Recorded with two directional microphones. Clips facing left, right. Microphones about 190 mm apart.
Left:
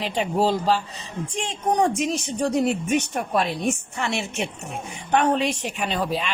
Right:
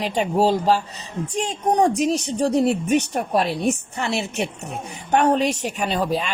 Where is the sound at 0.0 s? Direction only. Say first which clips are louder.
Right 3 dB; 40° right (ahead or behind).